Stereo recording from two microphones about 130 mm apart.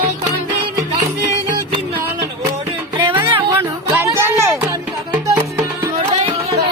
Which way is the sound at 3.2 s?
15° right (ahead or behind).